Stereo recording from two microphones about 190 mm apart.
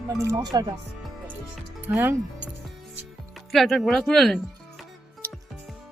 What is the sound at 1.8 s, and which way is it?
Speech, 10° right (ahead or behind).